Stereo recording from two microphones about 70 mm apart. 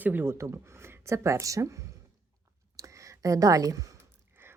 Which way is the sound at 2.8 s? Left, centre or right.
Right.